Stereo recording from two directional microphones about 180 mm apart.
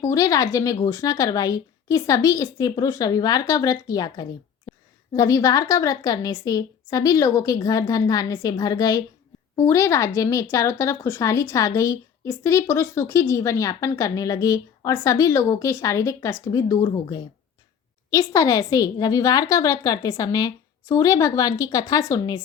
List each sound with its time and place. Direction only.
0.0 s speech: 20° left (ahead or behind)